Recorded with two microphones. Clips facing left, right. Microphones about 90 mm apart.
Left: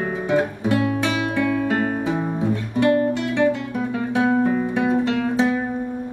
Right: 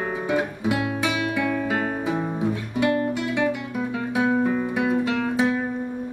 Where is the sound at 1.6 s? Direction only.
10° right (ahead or behind).